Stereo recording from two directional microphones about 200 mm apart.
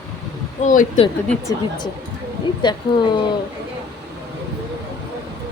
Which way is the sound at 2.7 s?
20° left (ahead or behind).